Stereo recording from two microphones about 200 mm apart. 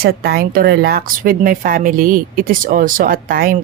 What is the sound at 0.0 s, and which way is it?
Speech, 50° right (ahead or behind).